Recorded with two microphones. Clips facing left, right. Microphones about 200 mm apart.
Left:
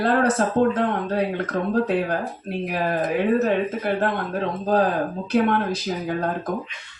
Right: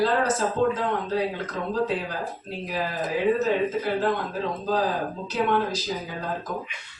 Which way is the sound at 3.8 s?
60° left (ahead or behind).